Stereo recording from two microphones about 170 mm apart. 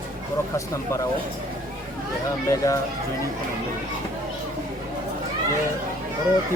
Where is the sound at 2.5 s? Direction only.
20° left (ahead or behind).